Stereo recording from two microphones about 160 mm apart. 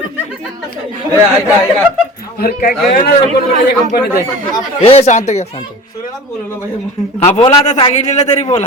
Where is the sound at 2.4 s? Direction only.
65° left (ahead or behind).